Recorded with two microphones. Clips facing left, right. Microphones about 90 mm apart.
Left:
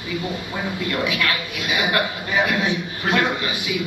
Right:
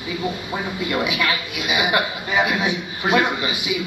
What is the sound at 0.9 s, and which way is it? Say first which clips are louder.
A man's voice: right 2 dB; 15° right (ahead or behind).